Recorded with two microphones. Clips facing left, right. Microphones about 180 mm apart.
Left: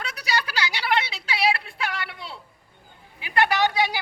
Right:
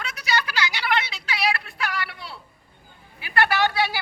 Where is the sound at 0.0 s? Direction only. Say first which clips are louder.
Right 1 dB; 35° left (ahead or behind).